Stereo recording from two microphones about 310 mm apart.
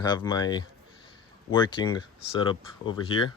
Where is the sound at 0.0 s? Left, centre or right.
Centre.